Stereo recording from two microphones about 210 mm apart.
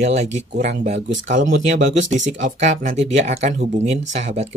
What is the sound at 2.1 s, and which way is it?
Speech, 35° right (ahead or behind).